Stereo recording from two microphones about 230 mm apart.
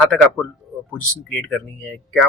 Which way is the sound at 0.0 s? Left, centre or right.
Centre.